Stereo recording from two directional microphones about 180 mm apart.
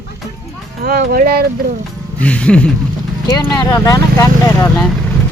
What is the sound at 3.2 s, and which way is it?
Speech, 20° left (ahead or behind).